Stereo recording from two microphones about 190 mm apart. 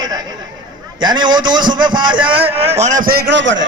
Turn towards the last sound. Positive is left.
turn(degrees=-70)  # may be behind; listen again after turning